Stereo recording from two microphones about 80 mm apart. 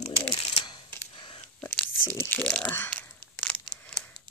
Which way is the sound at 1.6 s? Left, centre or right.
Centre.